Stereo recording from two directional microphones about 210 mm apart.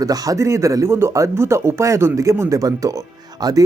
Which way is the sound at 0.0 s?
15° right (ahead or behind).